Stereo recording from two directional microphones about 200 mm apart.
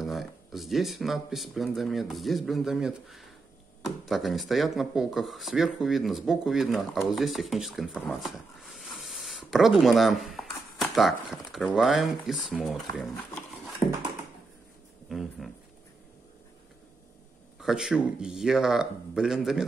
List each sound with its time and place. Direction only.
0.0 s speech: centre (ahead or behind)
15.0 s speech: centre (ahead or behind)
17.6 s speech: 5° right (ahead or behind)